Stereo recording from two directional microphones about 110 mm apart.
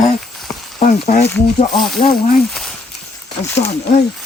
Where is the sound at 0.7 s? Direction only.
85° left.